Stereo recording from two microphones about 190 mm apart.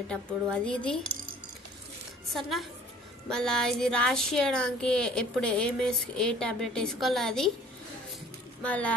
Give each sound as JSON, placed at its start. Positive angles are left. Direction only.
{"t": 0.5, "sound": "speech", "side_deg": 5}
{"t": 2.2, "sound": "speech", "side_deg": 0}
{"t": 8.6, "sound": "speech", "side_deg": 5}